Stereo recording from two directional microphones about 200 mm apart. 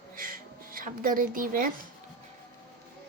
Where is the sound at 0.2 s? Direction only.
45° right (ahead or behind).